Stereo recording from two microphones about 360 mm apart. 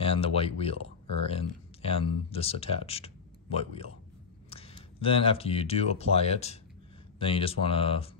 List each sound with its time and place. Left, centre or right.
0.0 s speech: centre